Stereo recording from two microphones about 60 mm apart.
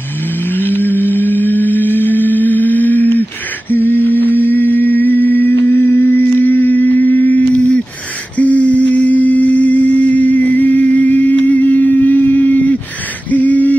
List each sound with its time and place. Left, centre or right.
0.5 s music: left
3.7 s humming: left
5.8 s music: left
6.1 s a sound: left
8.4 s humming: left
12.4 s a sound: left